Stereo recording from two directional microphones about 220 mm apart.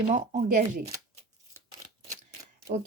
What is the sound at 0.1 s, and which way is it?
Speech, 30° right (ahead or behind).